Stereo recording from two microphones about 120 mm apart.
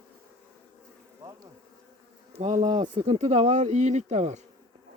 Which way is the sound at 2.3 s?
70° right (ahead or behind).